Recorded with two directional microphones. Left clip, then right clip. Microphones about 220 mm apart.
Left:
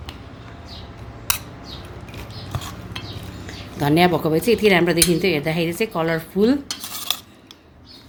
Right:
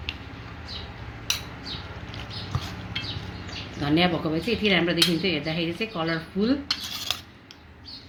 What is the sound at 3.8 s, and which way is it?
Speech, 55° left (ahead or behind).